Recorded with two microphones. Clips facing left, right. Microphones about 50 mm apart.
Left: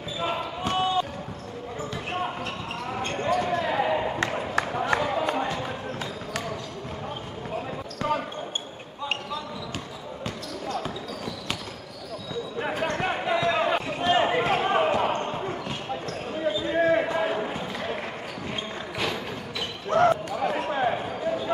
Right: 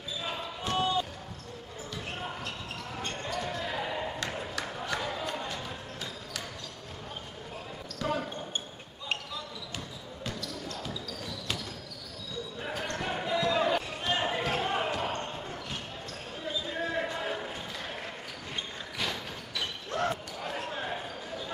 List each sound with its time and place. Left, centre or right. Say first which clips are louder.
0.2 s basketball bounce: left 9 dB; left
2.0 s basketball bounce: left 8 dB; left
8.0 s basketball bounce: left 5 dB; left
10.2 s basketball bounce: left 4 dB; left
12.9 s basketball bounce: left 3 dB; left
19.9 s basketball bounce: left 12 dB; left